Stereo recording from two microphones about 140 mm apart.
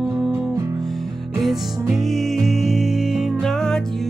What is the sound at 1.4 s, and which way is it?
Music, centre (ahead or behind).